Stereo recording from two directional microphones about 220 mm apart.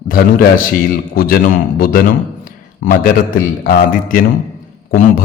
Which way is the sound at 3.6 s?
40° left (ahead or behind).